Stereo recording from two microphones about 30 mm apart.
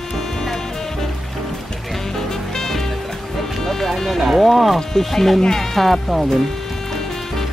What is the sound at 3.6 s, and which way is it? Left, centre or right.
Speech, centre.